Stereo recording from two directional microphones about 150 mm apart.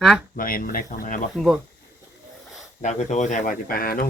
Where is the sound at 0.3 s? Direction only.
70° left (ahead or behind).